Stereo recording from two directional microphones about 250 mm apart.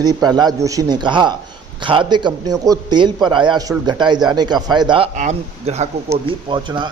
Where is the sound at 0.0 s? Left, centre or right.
Centre.